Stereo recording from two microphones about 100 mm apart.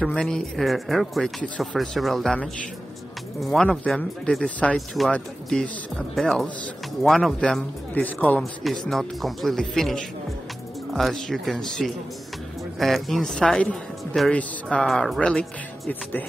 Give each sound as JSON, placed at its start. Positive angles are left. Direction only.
{"t": 0.0, "sound": "speech", "side_deg": 5}
{"t": 3.3, "sound": "speech", "side_deg": 5}
{"t": 7.3, "sound": "speech", "side_deg": 10}
{"t": 8.4, "sound": "speech", "side_deg": 5}